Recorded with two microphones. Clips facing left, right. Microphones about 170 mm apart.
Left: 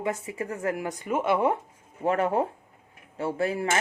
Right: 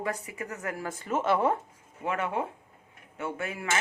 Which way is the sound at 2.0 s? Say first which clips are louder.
Left 6 dB; 35° left (ahead or behind).